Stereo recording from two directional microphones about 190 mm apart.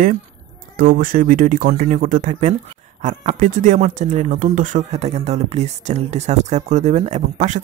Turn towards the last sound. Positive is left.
turn(degrees=-40)  # may be behind; listen again after turning